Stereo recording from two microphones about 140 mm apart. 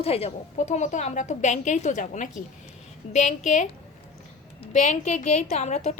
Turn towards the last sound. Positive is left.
turn(degrees=55)  # may be behind; listen again after turning